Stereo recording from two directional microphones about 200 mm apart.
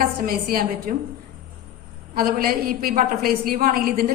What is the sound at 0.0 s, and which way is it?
Speech, 45° right (ahead or behind).